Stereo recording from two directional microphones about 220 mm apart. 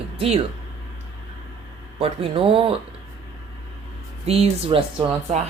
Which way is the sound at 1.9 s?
25° right (ahead or behind).